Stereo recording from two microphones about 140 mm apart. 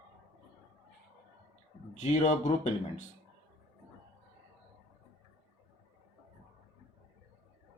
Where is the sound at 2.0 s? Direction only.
55° left (ahead or behind).